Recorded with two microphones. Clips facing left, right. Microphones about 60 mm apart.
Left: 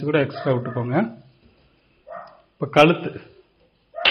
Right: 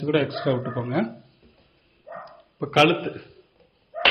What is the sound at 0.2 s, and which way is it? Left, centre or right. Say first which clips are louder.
Speech: left 2 dB; left.